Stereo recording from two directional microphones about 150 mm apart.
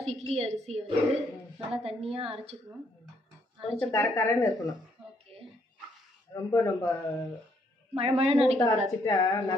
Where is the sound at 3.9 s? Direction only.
20° left (ahead or behind).